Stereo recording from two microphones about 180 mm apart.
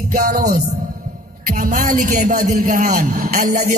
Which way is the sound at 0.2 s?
55° right (ahead or behind).